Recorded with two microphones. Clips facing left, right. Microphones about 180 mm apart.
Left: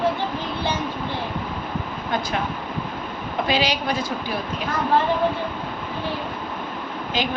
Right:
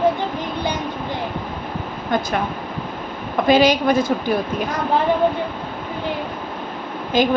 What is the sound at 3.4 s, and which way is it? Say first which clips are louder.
Speech: right 9 dB; 45° right (ahead or behind).